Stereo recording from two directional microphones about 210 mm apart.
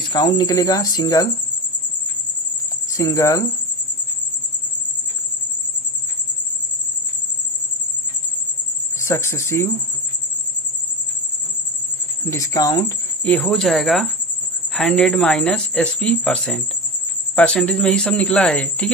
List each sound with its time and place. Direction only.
0.1 s speech: 20° left (ahead or behind)
2.9 s speech: 15° left (ahead or behind)
9.0 s speech: 15° left (ahead or behind)
12.2 s speech: 15° left (ahead or behind)
13.2 s speech: 5° left (ahead or behind)